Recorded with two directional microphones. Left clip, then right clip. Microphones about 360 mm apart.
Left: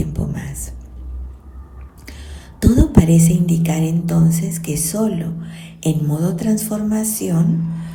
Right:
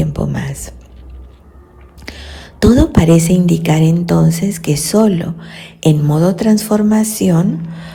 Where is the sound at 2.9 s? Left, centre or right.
Right.